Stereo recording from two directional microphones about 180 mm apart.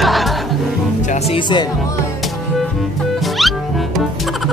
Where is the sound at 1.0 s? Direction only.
40° left (ahead or behind).